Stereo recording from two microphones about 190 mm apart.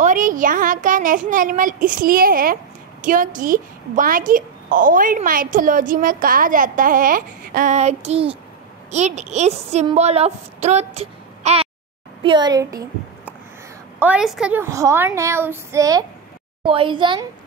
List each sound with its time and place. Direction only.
0.0 s a woman's voice: 45° right (ahead or behind); by 13.3 s 20° right (ahead or behind)
13.9 s a woman's voice: 5° right (ahead or behind); by 17.3 s 25° right (ahead or behind)